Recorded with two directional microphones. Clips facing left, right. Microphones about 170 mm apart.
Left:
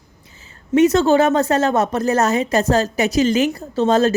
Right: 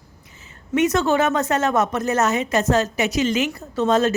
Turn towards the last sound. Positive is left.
turn(degrees=30)  # may be behind; listen again after turning